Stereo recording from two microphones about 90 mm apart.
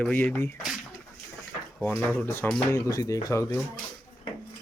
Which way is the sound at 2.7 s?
35° left (ahead or behind).